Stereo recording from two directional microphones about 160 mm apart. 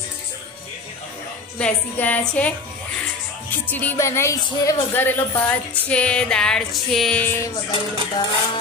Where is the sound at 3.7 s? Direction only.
10° left (ahead or behind).